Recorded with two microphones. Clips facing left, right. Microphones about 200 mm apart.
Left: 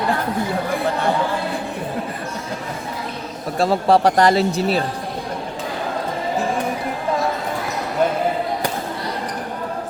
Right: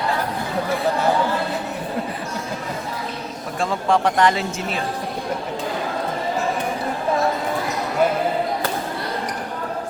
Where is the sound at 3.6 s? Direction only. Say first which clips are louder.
Left 5 dB; 35° left (ahead or behind).